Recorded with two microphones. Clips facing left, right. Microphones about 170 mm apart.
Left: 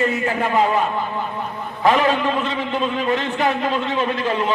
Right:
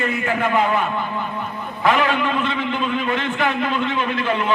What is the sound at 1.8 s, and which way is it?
A man's voice, 35° left (ahead or behind).